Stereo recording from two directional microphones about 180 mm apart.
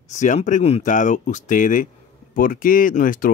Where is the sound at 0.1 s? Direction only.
40° left (ahead or behind).